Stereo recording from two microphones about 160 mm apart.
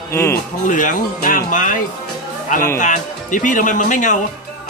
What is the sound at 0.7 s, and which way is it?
Speech, 55° left (ahead or behind).